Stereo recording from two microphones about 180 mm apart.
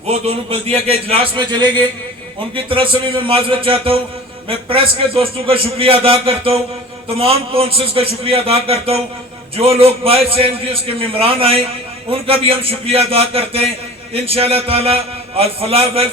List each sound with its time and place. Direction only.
0.1 s a man's voice: 35° right (ahead or behind)